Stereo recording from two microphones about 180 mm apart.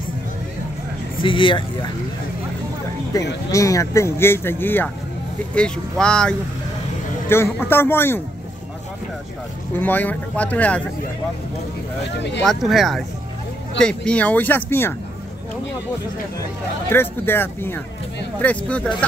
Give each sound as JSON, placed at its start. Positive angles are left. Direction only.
{"t": 1.2, "sound": "speech", "side_deg": 30}
{"t": 3.5, "sound": "speech", "side_deg": 20}
{"t": 9.8, "sound": "speech", "side_deg": 10}
{"t": 12.4, "sound": "speech", "side_deg": 0}
{"t": 16.9, "sound": "speech", "side_deg": 10}